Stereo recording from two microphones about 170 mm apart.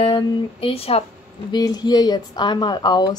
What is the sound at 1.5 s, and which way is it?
A woman's voice, 25° left (ahead or behind).